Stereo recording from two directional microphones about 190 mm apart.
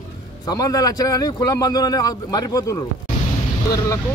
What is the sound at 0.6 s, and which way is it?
A man's voice, 20° left (ahead or behind).